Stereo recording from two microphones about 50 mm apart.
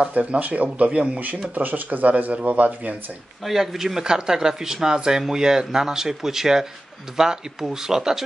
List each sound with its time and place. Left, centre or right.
0.1 s speech: right
3.4 s speech: centre